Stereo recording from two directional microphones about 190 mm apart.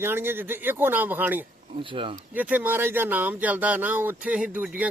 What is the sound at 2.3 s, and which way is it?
Speech, 10° right (ahead or behind).